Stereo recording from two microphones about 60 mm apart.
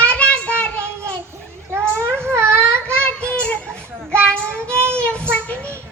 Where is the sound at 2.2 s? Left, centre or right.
Right.